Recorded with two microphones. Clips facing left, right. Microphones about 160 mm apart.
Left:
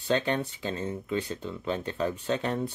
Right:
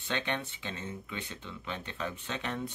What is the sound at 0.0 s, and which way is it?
Speech, 35° left (ahead or behind).